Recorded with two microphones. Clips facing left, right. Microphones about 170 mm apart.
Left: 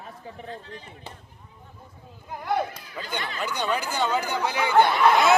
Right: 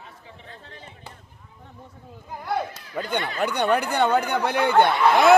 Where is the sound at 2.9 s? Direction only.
55° right (ahead or behind).